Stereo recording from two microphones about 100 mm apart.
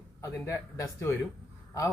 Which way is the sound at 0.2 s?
30° left (ahead or behind).